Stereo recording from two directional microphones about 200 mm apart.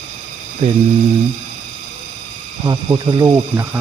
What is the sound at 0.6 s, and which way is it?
Speech, 35° right (ahead or behind).